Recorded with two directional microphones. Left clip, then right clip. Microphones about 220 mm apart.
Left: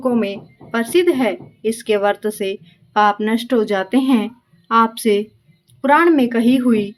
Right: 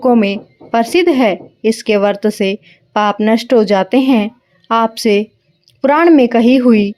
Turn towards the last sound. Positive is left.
turn(degrees=-30)  # may be behind; listen again after turning